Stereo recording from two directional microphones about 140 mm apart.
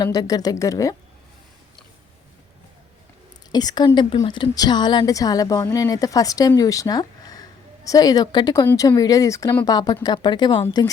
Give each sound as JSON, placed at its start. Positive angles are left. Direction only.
{"t": 0.0, "sound": "a woman's voice", "side_deg": 25}
{"t": 3.5, "sound": "a woman's voice", "side_deg": 30}